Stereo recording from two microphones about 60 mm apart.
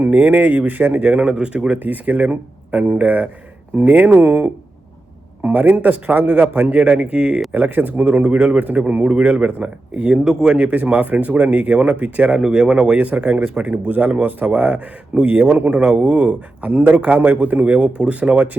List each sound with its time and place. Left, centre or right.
0.0 s speech: right
5.4 s a sound: right
5.6 s speech: right
7.5 s speech: right; by 10.6 s centre
10.6 s speech: right
12.4 s speech: centre